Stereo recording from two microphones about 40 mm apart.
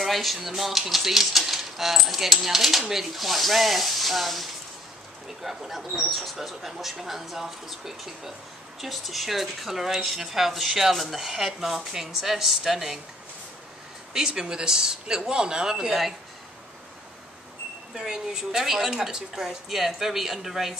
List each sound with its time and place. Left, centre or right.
0.0 s a woman's voice: centre
14.1 s speech: centre
17.9 s a woman's voice: centre